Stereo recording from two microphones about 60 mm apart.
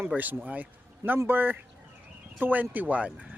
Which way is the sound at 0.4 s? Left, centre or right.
Right.